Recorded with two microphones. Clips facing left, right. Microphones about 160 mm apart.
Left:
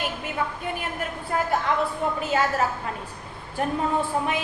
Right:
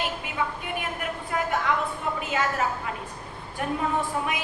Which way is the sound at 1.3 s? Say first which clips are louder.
Left 2 dB; 35° left (ahead or behind).